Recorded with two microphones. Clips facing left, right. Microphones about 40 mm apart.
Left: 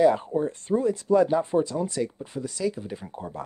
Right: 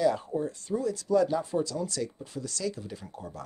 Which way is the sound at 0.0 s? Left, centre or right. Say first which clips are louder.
Left 6 dB; left.